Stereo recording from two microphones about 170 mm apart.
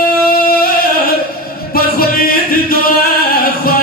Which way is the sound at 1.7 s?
60° left (ahead or behind).